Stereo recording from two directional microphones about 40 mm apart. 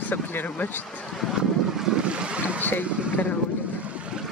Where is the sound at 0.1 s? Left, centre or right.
Left.